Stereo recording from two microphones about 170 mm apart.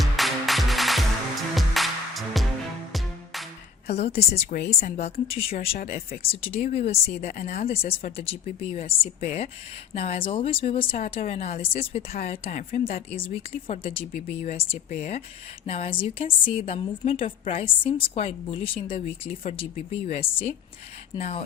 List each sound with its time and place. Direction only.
0.0 s music: centre (ahead or behind)
3.8 s speech: 35° left (ahead or behind)
5.7 s speech: 60° left (ahead or behind)
6.2 s speech: 35° left (ahead or behind)